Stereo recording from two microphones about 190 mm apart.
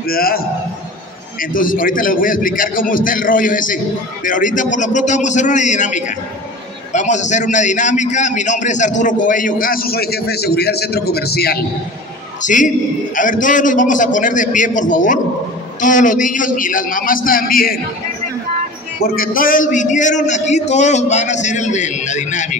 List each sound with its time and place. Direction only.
0.0 s a man's voice: 50° left (ahead or behind)
1.4 s a man's voice: 45° left (ahead or behind)
12.4 s a man's voice: 40° left (ahead or behind)
18.9 s a man's voice: 50° left (ahead or behind)